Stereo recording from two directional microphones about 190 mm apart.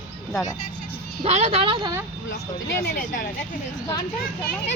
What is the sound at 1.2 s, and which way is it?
Speech, 35° right (ahead or behind).